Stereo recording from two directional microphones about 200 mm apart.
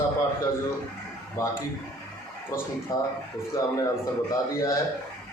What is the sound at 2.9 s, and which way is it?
Speech, 20° left (ahead or behind).